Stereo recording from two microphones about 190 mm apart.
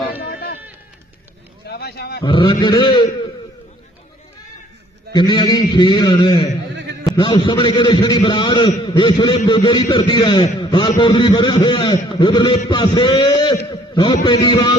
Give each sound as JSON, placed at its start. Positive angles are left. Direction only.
{"t": 0.3, "sound": "sheep", "side_deg": 55}
{"t": 1.7, "sound": "a sound", "side_deg": 55}
{"t": 2.2, "sound": "a man's voice", "side_deg": 25}
{"t": 5.1, "sound": "a man's voice", "side_deg": 20}
{"t": 13.7, "sound": "a sound", "side_deg": 25}
{"t": 14.2, "sound": "a man's voice", "side_deg": 25}